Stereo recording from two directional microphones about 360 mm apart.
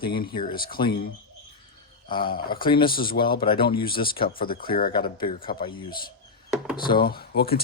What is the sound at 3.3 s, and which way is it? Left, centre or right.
Speech, centre.